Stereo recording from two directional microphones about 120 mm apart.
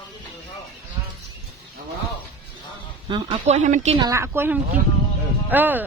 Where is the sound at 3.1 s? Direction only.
45° right (ahead or behind).